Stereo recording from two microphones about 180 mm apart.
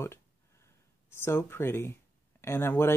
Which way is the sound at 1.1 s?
15° left (ahead or behind).